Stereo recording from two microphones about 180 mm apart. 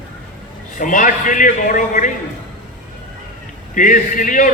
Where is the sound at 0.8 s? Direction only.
45° left (ahead or behind).